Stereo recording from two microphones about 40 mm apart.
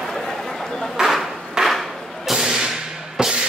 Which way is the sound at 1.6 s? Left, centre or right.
Right.